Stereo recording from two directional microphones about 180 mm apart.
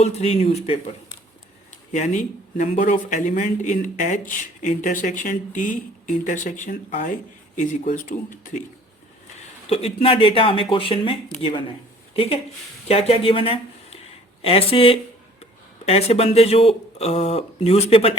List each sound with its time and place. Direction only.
0.0 s speech: 35° left (ahead or behind)
1.9 s speech: 40° left (ahead or behind)
9.6 s speech: 35° left (ahead or behind)